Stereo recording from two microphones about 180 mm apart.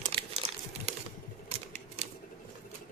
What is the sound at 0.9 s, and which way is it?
Typing, 35° right (ahead or behind).